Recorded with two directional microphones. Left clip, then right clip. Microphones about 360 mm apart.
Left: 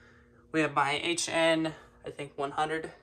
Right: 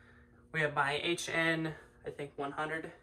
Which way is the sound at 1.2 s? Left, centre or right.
Centre.